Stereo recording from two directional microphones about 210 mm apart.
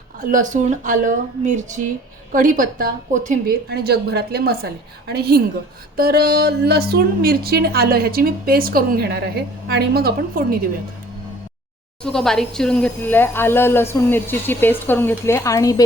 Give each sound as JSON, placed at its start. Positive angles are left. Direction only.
{"t": 0.3, "sound": "a woman's voice", "side_deg": -40}
{"t": 12.0, "sound": "speech", "side_deg": 0}